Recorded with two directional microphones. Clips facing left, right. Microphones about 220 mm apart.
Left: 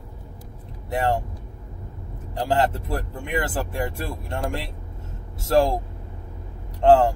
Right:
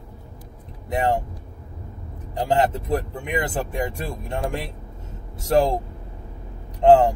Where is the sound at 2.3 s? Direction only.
20° right (ahead or behind).